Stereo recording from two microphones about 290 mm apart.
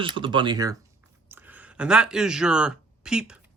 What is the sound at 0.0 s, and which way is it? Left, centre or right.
Speech, centre.